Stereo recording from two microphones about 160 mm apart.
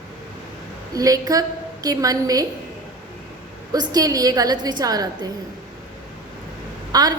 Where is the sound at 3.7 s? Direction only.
25° right (ahead or behind).